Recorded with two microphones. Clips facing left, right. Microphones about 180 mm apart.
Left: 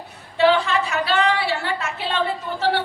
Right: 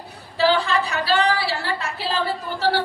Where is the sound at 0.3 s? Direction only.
35° right (ahead or behind).